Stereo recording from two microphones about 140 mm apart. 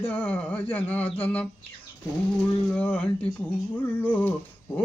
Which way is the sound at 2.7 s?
10° left (ahead or behind).